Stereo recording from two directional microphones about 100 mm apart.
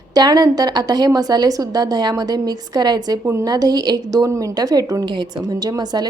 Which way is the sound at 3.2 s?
25° right (ahead or behind).